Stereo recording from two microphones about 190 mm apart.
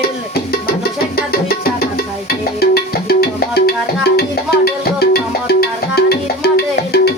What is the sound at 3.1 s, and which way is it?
Music, 55° left (ahead or behind).